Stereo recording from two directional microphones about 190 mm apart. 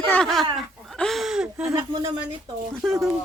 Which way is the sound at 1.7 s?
15° right (ahead or behind).